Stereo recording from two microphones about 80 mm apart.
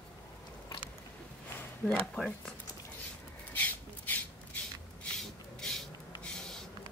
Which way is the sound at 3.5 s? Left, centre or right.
Centre.